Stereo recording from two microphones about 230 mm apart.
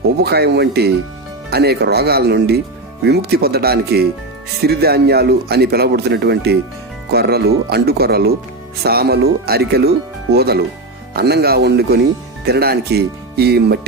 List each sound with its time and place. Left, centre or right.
0.2 s speech: right